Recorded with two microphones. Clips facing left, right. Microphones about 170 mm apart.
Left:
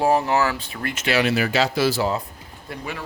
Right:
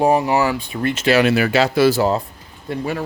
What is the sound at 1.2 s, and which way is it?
Speech, 60° right (ahead or behind).